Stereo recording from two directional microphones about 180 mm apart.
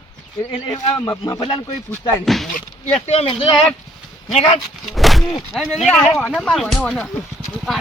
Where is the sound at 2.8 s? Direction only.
40° left (ahead or behind).